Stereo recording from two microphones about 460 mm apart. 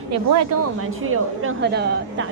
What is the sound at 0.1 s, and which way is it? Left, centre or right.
A woman's voice, right.